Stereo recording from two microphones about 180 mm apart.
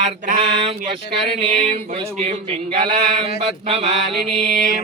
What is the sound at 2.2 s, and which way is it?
Mantra, 35° right (ahead or behind).